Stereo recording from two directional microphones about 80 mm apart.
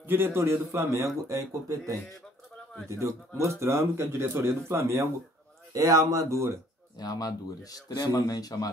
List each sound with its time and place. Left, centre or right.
0.0 s a man's voice: right
7.0 s speech: left